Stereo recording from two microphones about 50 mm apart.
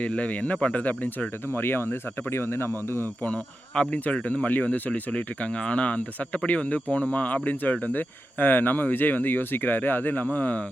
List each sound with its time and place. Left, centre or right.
0.0 s speech: left
1.5 s speech: left
3.2 s speech: left